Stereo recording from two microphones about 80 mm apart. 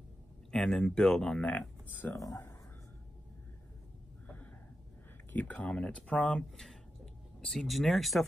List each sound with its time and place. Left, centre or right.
0.5 s speech: centre
2.1 s speech: left
5.3 s speech: centre